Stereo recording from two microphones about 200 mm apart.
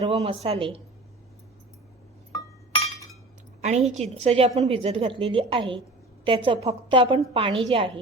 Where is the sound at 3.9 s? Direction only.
30° right (ahead or behind).